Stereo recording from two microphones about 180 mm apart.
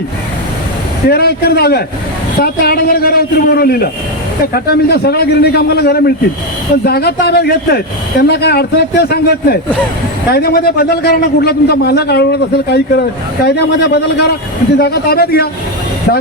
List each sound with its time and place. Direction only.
1.1 s a man's voice: 60° left (ahead or behind)